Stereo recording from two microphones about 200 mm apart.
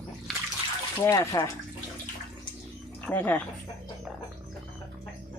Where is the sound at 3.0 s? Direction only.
10° left (ahead or behind).